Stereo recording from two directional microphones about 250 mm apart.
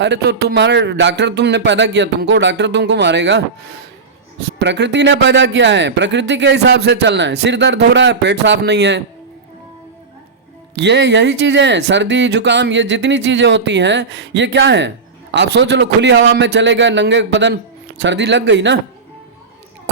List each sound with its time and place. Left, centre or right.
0.0 s speech: right
4.6 s speech: right
10.8 s speech: right